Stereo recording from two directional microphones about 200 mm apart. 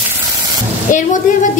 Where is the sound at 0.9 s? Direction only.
40° left (ahead or behind).